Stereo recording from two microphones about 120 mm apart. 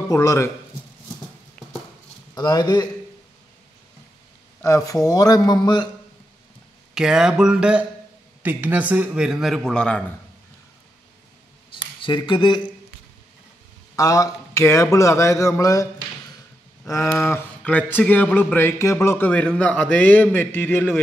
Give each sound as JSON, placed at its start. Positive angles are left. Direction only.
{"t": 0.1, "sound": "a man's voice", "side_deg": 25}
{"t": 2.3, "sound": "speech", "side_deg": 35}
{"t": 4.6, "sound": "a man's voice", "side_deg": 30}
{"t": 6.9, "sound": "a man's voice", "side_deg": -5}
{"t": 11.7, "sound": "speech", "side_deg": 45}
{"t": 13.9, "sound": "a man's voice", "side_deg": 30}